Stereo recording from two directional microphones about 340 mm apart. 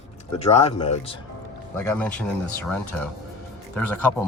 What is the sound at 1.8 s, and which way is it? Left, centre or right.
Speech, centre.